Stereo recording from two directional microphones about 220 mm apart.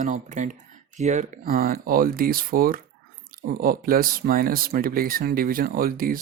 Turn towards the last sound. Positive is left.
turn(degrees=-40)  # may be behind; listen again after turning